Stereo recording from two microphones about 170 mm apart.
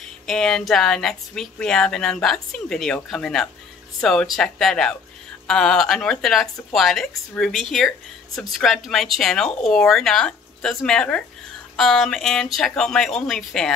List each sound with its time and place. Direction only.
0.3 s speech: 5° left (ahead or behind)